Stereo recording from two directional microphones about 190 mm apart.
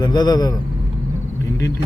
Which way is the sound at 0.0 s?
20° left (ahead or behind).